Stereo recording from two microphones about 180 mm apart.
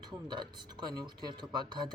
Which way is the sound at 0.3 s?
25° right (ahead or behind).